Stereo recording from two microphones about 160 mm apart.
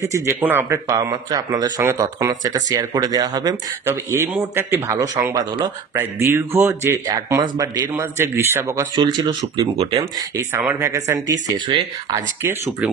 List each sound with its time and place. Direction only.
0.1 s speech: 15° right (ahead or behind)
9.8 s speech: 35° right (ahead or behind)
10.1 s speech: 20° right (ahead or behind)